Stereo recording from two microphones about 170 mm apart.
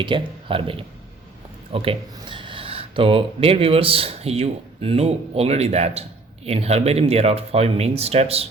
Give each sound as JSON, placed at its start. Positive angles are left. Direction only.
{"t": 0.0, "sound": "speech", "side_deg": -30}